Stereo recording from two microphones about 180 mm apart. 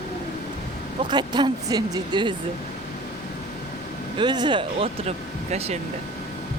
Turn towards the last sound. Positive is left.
turn(degrees=-35)  # may be behind; listen again after turning